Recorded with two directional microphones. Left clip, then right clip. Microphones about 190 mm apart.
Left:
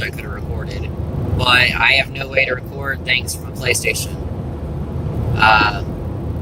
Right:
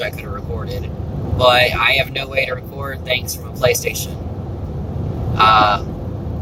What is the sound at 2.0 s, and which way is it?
Speech, 20° right (ahead or behind).